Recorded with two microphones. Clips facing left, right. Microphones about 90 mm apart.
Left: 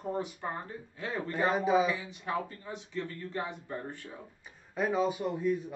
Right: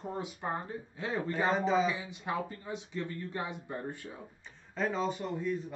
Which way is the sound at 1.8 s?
15° right (ahead or behind).